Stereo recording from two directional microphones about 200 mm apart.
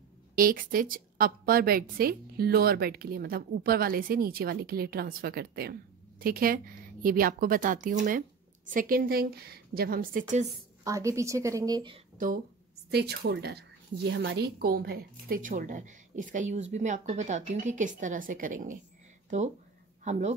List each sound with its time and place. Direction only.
0.4 s a woman's voice: 45° right (ahead or behind)
10.8 s a woman's voice: 15° right (ahead or behind)
12.9 s a woman's voice: 55° right (ahead or behind)
20.1 s a woman's voice: 35° right (ahead or behind)